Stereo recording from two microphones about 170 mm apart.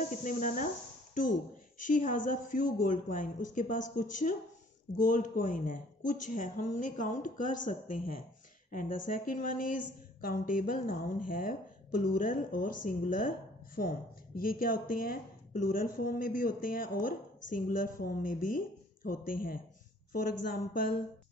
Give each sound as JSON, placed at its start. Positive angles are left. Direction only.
{"t": 0.1, "sound": "a woman's voice", "side_deg": 50}
{"t": 1.8, "sound": "a woman's voice", "side_deg": 50}